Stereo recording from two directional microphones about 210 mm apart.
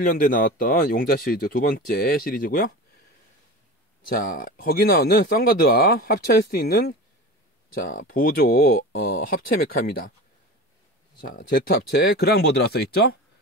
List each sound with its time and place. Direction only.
0.0 s speech: 45° left (ahead or behind)
4.1 s speech: 40° left (ahead or behind)
11.2 s speech: 45° left (ahead or behind)